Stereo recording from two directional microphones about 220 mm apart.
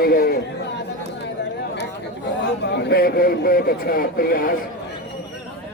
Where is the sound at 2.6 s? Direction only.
50° left (ahead or behind).